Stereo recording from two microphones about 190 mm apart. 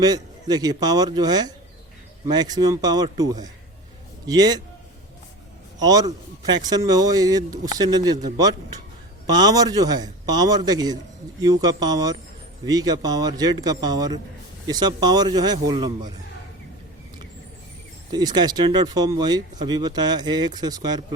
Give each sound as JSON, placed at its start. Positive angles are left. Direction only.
{"t": 0.0, "sound": "speech", "side_deg": -20}
{"t": 5.8, "sound": "speech", "side_deg": -20}
{"t": 9.2, "sound": "speech", "side_deg": -20}
{"t": 18.1, "sound": "speech", "side_deg": -20}